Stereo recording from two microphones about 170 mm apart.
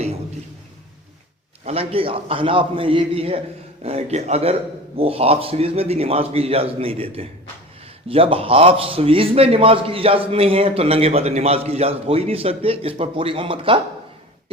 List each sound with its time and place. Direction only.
1.6 s a man's voice: 35° right (ahead or behind)